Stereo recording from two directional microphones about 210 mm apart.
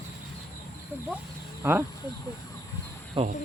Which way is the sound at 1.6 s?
10° right (ahead or behind).